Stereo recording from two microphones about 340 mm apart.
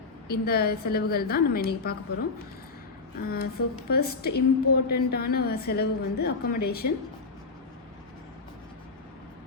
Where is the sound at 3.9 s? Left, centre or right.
Left.